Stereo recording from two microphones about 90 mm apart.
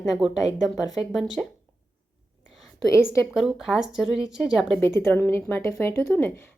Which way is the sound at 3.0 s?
35° left (ahead or behind).